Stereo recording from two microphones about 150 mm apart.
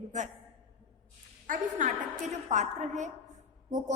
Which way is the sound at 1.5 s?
55° right (ahead or behind).